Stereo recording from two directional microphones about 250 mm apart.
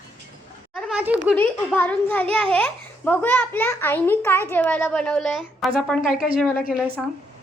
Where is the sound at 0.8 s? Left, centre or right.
Centre.